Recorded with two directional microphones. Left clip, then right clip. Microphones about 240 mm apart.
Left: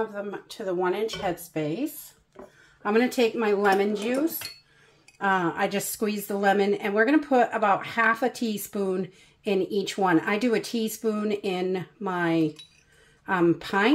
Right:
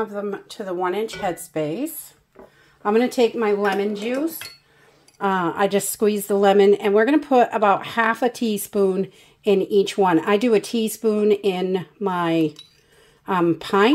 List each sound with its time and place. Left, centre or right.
0.1 s a woman's voice: right; by 4.4 s centre
5.2 s a woman's voice: right